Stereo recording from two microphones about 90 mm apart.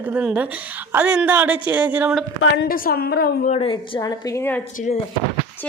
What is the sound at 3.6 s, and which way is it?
Speech, 65° left (ahead or behind).